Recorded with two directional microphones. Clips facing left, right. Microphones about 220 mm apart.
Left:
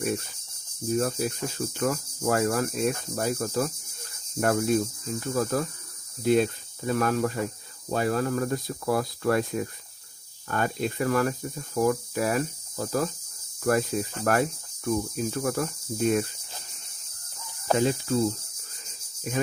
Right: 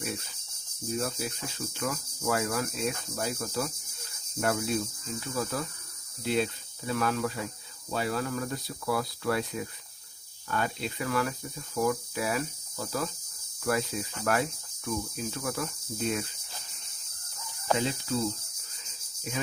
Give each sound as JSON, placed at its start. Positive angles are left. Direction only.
{"t": 0.9, "sound": "speech", "side_deg": 45}
{"t": 17.7, "sound": "cricket", "side_deg": 45}